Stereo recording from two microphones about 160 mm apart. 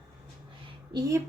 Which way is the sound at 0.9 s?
20° right (ahead or behind).